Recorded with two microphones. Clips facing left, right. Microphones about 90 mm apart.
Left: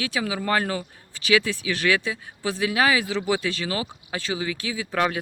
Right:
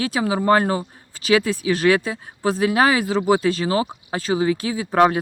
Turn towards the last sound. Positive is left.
turn(degrees=-35)  # may be behind; listen again after turning